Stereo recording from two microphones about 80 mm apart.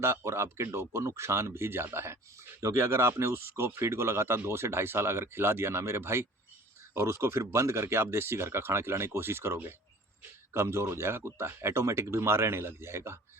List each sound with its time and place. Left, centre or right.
0.0 s speech: right